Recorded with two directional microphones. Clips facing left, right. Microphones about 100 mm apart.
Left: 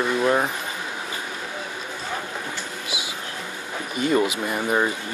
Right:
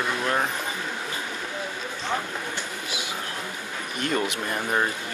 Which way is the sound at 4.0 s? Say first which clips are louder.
Left 6 dB; 10° left (ahead or behind).